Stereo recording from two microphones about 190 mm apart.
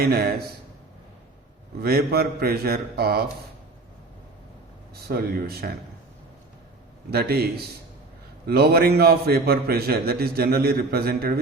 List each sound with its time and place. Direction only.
0.0 s a man's voice: 55° right (ahead or behind)
1.8 s a man's voice: 55° right (ahead or behind)
5.0 s a man's voice: 55° right (ahead or behind)
7.1 s a man's voice: 55° right (ahead or behind)